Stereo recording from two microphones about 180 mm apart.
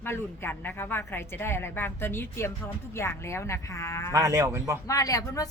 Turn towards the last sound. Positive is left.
turn(degrees=20)  # may be behind; listen again after turning